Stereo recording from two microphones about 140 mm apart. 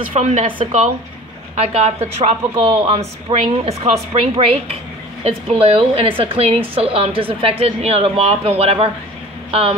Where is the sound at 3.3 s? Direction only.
50° right (ahead or behind).